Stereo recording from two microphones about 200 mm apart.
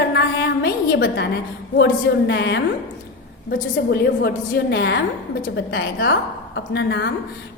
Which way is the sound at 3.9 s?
55° left (ahead or behind).